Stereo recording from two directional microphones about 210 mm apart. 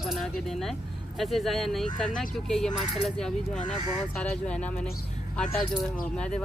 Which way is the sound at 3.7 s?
20° right (ahead or behind).